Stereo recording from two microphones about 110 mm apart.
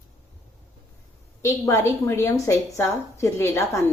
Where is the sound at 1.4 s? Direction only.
25° left (ahead or behind).